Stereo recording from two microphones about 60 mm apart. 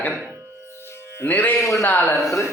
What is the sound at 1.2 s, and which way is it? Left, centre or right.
Speech, left.